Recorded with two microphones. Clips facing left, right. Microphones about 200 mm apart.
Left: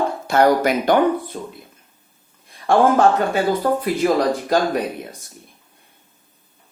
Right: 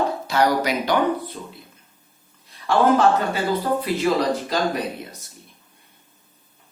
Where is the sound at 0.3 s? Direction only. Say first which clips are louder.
Left 6 dB; 50° left (ahead or behind).